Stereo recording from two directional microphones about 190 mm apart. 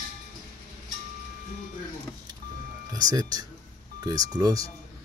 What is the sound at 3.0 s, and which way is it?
Speech, 20° right (ahead or behind).